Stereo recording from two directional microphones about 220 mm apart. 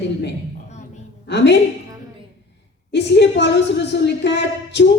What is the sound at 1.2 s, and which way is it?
Speech, 50° left (ahead or behind).